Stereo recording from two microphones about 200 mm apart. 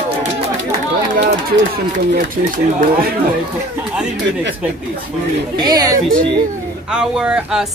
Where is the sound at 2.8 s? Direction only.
45° right (ahead or behind).